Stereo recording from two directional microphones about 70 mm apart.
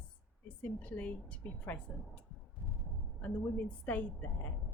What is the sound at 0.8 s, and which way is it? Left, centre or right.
A woman's voice, left.